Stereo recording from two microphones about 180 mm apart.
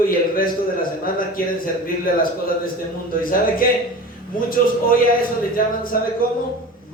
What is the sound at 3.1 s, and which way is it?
A man's voice, 50° left (ahead or behind).